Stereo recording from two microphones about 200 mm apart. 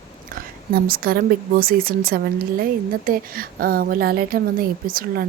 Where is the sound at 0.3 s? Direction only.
50° right (ahead or behind).